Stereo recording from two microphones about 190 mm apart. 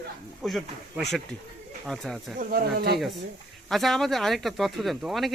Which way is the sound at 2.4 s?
50° right (ahead or behind).